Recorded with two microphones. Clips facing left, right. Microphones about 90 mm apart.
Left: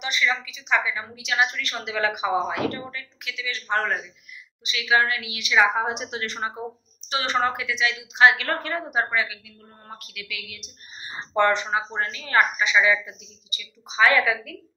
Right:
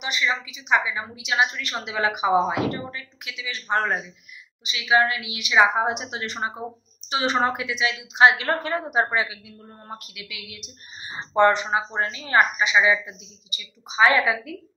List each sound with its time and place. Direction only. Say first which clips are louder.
0.0 s a woman's voice: even; 15° right (ahead or behind)